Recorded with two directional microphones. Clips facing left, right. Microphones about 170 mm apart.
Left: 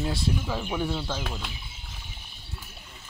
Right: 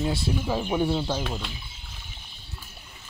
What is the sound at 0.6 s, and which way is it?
Speech, 25° right (ahead or behind).